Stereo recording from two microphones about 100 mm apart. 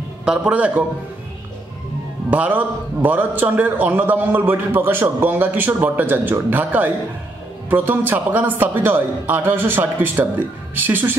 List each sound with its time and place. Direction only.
0.2 s a man's voice: 10° right (ahead or behind)
2.3 s a man's voice: 15° right (ahead or behind)